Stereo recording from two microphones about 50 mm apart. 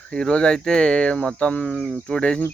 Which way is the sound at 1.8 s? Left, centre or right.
Centre.